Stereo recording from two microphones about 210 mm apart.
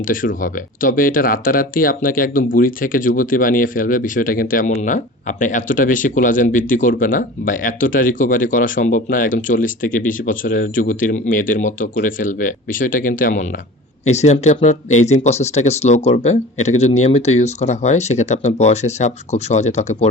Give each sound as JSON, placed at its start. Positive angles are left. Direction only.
{"t": 0.0, "sound": "speech", "side_deg": 40}